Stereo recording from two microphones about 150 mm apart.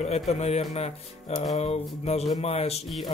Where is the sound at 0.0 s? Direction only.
45° left (ahead or behind).